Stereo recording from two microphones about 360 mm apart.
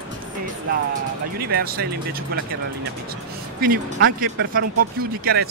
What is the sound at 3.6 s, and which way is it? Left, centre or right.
Speech, right.